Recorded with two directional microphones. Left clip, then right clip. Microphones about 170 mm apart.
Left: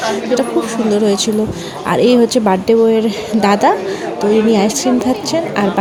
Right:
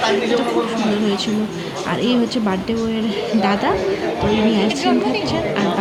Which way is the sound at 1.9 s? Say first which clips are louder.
Left 10 dB; 35° left (ahead or behind).